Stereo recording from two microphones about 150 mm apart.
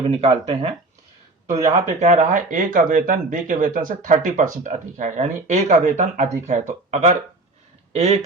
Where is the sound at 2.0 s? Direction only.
55° right (ahead or behind).